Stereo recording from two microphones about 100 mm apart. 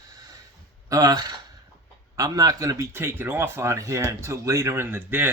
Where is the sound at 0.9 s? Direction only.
40° right (ahead or behind).